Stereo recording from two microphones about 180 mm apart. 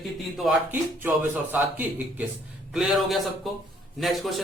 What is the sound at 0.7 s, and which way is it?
A man's voice, 10° right (ahead or behind).